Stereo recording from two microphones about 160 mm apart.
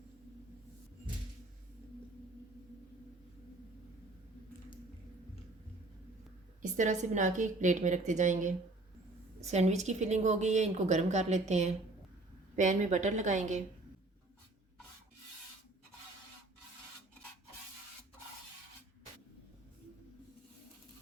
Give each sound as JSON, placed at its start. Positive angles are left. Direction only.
{"t": 6.6, "sound": "a woman's voice", "side_deg": -50}